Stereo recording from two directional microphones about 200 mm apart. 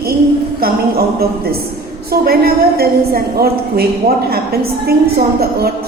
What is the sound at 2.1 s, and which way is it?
A woman's voice, 50° right (ahead or behind).